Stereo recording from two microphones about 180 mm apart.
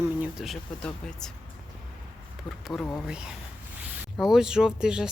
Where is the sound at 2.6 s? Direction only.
Centre (ahead or behind).